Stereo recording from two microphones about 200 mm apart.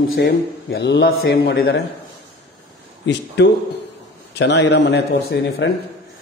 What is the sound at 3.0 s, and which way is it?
Speech, 60° left (ahead or behind).